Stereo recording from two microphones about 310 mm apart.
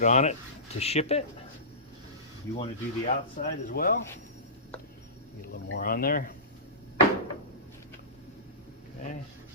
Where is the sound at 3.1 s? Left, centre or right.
Left.